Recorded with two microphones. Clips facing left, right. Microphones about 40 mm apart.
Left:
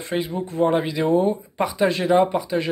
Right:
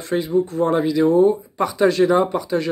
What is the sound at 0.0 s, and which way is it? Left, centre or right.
A man's voice, left.